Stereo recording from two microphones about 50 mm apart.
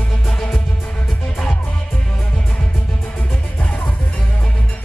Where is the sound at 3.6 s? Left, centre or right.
Left.